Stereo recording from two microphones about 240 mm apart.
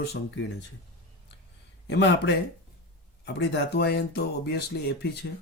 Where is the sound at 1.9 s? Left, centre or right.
Left.